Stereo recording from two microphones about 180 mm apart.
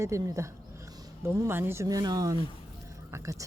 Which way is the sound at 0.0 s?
15° right (ahead or behind).